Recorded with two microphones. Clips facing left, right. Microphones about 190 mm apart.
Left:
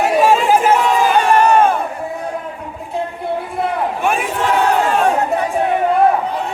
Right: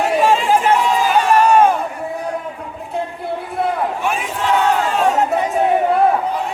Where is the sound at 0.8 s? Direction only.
55° left (ahead or behind).